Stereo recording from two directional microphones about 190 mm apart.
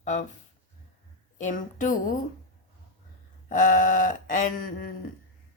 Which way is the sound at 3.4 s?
45° left (ahead or behind).